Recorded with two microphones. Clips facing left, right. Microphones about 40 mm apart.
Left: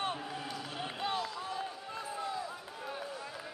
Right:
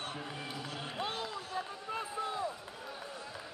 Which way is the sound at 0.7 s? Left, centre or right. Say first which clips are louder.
Left 2 dB; left.